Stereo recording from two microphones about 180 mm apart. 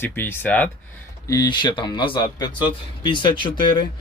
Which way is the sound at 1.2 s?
20° left (ahead or behind).